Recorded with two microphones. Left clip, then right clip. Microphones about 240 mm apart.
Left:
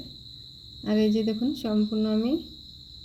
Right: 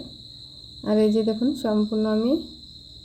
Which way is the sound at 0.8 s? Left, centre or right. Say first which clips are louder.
Right 5 dB; centre.